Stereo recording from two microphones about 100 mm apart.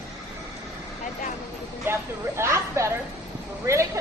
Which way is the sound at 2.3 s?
30° right (ahead or behind).